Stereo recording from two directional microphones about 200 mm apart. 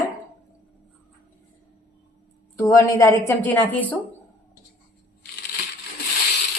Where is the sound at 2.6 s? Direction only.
15° left (ahead or behind).